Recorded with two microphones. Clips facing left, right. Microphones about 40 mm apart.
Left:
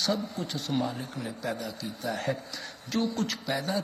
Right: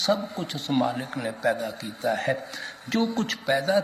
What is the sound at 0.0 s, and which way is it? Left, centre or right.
Speech, right.